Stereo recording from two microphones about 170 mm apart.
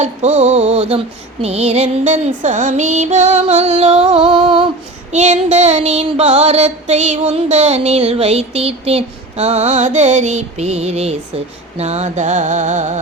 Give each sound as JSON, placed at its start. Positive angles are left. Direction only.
{"t": 0.0, "sound": "female singing", "side_deg": -40}
{"t": 11.8, "sound": "music", "side_deg": -40}